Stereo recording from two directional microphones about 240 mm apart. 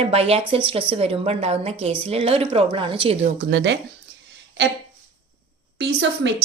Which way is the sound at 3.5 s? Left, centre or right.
Right.